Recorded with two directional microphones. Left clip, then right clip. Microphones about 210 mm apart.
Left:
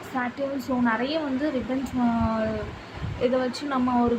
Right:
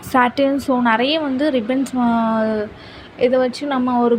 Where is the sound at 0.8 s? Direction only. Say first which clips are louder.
Right 8 dB; 35° right (ahead or behind).